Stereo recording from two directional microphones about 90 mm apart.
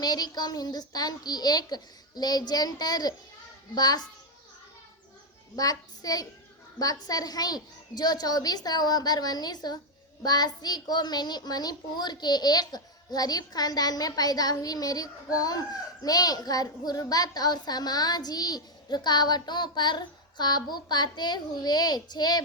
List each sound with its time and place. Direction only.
0.0 s a child's voice: 45° left (ahead or behind)
5.5 s a child's voice: 45° left (ahead or behind)